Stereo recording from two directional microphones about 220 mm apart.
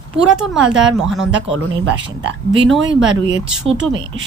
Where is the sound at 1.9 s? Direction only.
55° right (ahead or behind).